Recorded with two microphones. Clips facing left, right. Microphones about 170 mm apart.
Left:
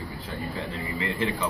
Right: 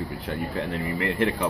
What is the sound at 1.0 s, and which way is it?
Speech, 60° right (ahead or behind).